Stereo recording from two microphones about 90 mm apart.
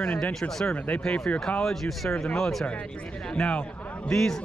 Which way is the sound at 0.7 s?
15° left (ahead or behind).